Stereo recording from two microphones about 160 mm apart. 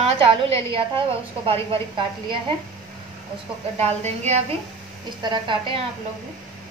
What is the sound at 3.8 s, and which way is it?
Speech, 45° right (ahead or behind).